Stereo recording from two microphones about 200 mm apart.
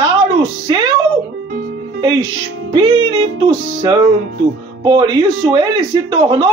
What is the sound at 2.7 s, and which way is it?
Speech, 25° right (ahead or behind).